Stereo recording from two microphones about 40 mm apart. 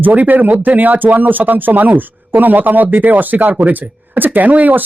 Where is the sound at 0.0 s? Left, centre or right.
Right.